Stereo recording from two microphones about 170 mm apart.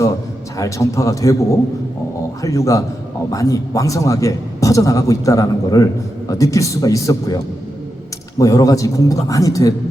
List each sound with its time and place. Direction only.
0.5 s a man's voice: 20° left (ahead or behind)